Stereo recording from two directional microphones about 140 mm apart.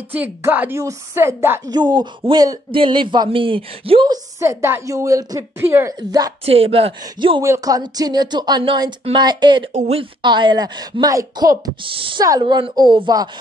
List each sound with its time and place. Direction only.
0.1 s a woman's voice: 15° right (ahead or behind)
1.7 s speech: 30° right (ahead or behind)
4.1 s a woman's voice: 20° right (ahead or behind)
5.9 s a woman's voice: 25° right (ahead or behind)
6.4 s speech: 45° right (ahead or behind)
7.4 s a woman's voice: 25° right (ahead or behind)
9.8 s speech: 45° right (ahead or behind)
10.2 s a woman's voice: 35° right (ahead or behind)
11.8 s speech: 35° right (ahead or behind)